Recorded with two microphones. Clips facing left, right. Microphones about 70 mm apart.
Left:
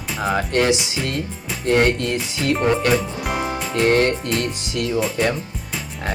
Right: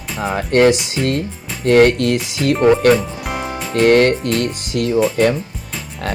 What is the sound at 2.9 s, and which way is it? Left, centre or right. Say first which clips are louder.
Music: right 1 dB; centre.